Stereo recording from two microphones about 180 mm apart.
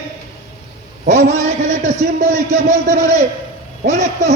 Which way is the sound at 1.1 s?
40° right (ahead or behind).